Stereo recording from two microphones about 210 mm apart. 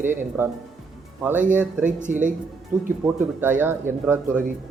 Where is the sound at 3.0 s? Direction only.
10° right (ahead or behind).